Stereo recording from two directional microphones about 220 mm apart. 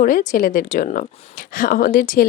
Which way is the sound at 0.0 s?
35° left (ahead or behind).